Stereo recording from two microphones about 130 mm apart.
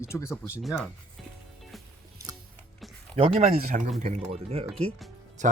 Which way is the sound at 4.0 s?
65° right (ahead or behind).